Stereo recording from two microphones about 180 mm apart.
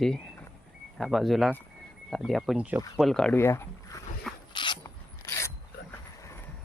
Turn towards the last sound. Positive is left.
turn(degrees=15)  # may be behind; listen again after turning